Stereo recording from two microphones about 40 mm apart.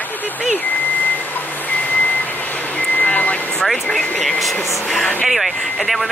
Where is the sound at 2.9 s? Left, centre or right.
Left.